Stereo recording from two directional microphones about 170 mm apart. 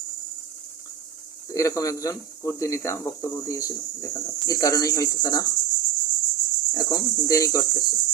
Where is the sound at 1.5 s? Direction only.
20° left (ahead or behind).